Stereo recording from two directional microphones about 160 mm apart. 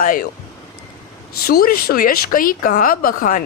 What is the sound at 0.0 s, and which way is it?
Speech, 60° left (ahead or behind).